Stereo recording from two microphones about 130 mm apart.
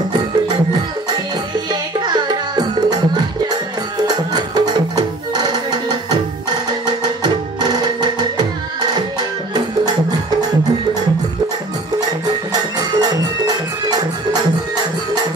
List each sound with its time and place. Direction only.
1.7 s music: 35° right (ahead or behind)
4.1 s music: 30° right (ahead or behind)
7.6 s music: 30° right (ahead or behind)
12.7 s music: 30° right (ahead or behind)